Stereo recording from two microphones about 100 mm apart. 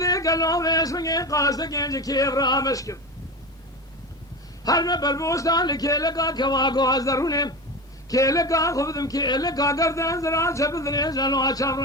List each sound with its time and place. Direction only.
0.0 s speech: 35° left (ahead or behind)
4.6 s speech: 40° left (ahead or behind)